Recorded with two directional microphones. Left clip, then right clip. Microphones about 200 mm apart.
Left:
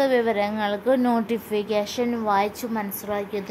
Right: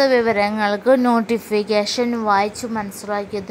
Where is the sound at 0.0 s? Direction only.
15° right (ahead or behind).